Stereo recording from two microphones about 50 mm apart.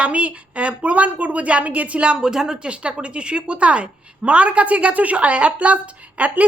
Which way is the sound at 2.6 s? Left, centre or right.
Right.